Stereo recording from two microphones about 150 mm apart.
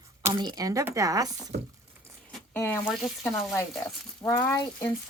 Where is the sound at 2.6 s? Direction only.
15° left (ahead or behind).